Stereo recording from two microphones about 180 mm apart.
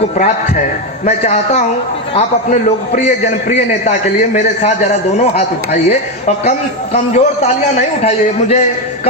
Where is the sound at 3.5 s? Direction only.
40° left (ahead or behind).